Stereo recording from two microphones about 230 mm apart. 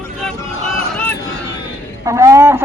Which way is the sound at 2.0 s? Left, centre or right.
Centre.